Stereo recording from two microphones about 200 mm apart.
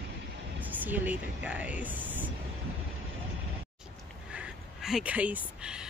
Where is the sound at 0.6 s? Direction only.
10° right (ahead or behind).